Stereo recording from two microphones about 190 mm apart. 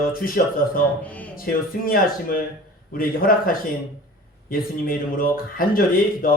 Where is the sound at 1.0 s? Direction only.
5° left (ahead or behind).